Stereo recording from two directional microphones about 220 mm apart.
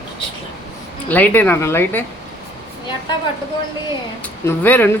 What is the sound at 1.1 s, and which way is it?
Speech, 10° left (ahead or behind).